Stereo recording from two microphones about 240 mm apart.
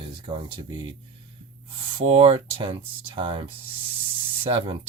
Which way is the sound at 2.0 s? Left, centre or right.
Right.